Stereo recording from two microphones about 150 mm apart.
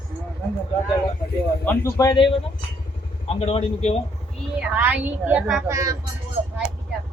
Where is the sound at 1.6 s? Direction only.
20° left (ahead or behind).